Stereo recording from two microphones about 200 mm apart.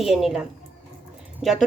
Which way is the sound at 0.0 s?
Centre (ahead or behind).